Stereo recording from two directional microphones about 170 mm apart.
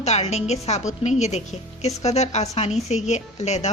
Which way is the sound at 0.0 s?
40° left (ahead or behind).